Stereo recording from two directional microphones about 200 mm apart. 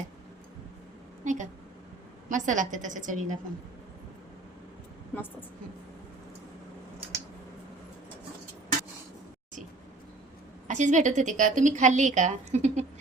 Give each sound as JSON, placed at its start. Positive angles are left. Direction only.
{"t": 1.2, "sound": "a sound", "side_deg": -40}
{"t": 2.3, "sound": "a woman's voice", "side_deg": -40}
{"t": 5.1, "sound": "a woman's voice", "side_deg": 10}
{"t": 10.7, "sound": "a woman's voice", "side_deg": -35}